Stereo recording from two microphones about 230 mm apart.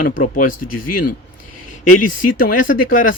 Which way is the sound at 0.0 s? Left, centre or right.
Left.